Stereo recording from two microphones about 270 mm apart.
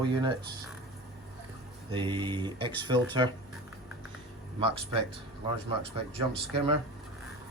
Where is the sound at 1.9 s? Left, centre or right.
Centre.